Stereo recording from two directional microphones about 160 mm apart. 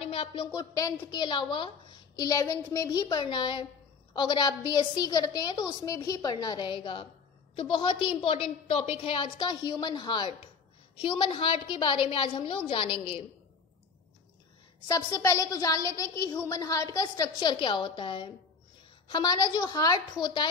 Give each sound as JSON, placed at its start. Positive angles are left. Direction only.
{"t": 0.0, "sound": "a sound", "side_deg": 35}
{"t": 0.5, "sound": "a woman's voice", "side_deg": 25}
{"t": 14.9, "sound": "a woman's voice", "side_deg": 20}